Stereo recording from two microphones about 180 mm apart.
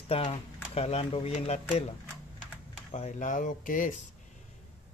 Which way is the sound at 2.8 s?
40° left (ahead or behind).